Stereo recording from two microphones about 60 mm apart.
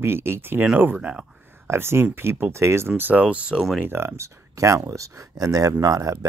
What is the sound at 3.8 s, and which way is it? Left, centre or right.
Speech, right.